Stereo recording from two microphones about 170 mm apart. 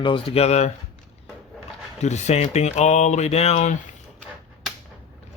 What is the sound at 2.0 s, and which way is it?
Speech, 40° left (ahead or behind).